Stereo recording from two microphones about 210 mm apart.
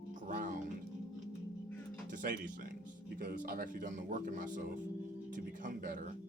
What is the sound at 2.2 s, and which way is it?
Speech, 45° right (ahead or behind).